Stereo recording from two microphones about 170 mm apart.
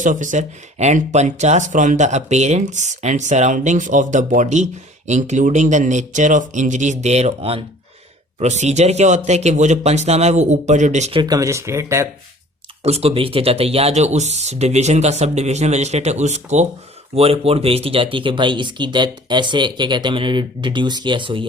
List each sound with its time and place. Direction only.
0.0 s speech: 50° right (ahead or behind)
11.2 s speech: 20° right (ahead or behind)
12.8 s speech: 35° right (ahead or behind)